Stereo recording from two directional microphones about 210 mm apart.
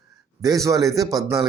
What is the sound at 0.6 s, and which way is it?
Speech, 15° right (ahead or behind).